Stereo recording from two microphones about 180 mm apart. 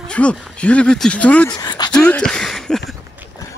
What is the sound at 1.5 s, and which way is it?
Speech, 25° left (ahead or behind).